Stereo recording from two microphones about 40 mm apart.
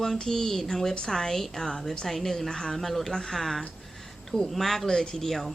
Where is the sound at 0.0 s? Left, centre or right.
Centre.